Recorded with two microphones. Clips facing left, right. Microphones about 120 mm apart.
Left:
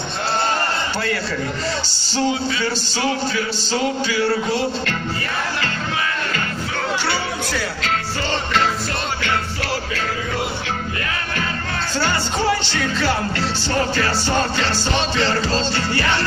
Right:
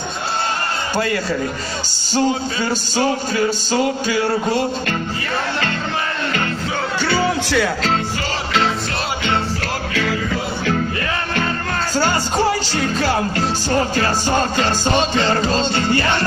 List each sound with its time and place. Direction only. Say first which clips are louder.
2.2 s music: left 1 dB; 45° right (ahead or behind)
11.9 s music: right 3 dB; 40° right (ahead or behind)